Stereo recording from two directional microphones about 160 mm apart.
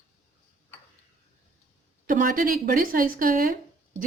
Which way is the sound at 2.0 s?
60° right (ahead or behind).